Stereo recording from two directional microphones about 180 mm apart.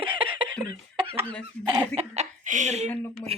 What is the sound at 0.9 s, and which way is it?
Chicken, 30° right (ahead or behind).